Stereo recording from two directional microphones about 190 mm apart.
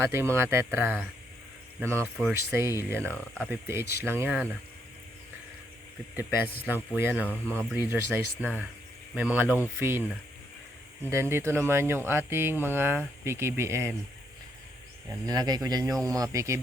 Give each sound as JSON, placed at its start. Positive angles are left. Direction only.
{"t": 0.0, "sound": "speech", "side_deg": -15}
{"t": 3.1, "sound": "speech", "side_deg": 5}
{"t": 3.5, "sound": "speech", "side_deg": -10}
{"t": 6.1, "sound": "speech", "side_deg": -10}
{"t": 7.3, "sound": "speech", "side_deg": 5}
{"t": 7.9, "sound": "speech", "side_deg": -10}
{"t": 11.1, "sound": "speech", "side_deg": -15}
{"t": 15.3, "sound": "speech", "side_deg": -20}